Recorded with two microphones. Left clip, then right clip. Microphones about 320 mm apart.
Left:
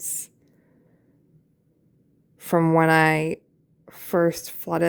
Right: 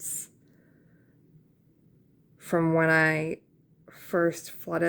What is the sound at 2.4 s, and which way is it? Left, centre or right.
A woman's voice, left.